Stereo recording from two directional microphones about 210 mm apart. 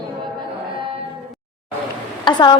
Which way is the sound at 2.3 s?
20° left (ahead or behind).